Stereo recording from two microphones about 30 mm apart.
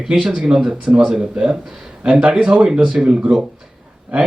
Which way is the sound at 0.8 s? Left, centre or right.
Right.